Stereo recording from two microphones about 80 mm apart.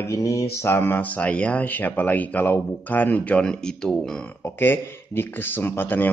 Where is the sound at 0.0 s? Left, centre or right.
Left.